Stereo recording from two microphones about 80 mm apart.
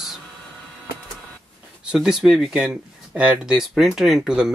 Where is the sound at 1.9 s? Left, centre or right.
Centre.